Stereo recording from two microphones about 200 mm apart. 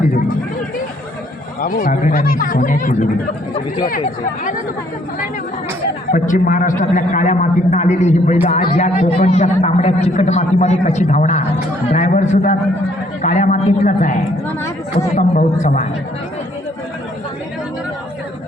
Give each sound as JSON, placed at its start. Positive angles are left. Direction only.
{"t": 1.6, "sound": "a man's voice", "side_deg": 45}
{"t": 6.1, "sound": "a man's voice", "side_deg": 40}